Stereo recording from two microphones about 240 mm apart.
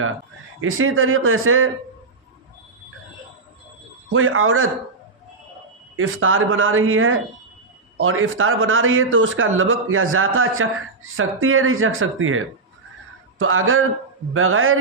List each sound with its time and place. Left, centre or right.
0.6 s a man's voice: right
4.1 s a man's voice: right
6.0 s a man's voice: right
13.4 s a man's voice: right